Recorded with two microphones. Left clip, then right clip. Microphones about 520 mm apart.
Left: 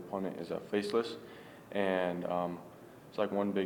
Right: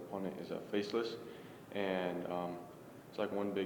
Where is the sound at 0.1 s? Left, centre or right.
Left.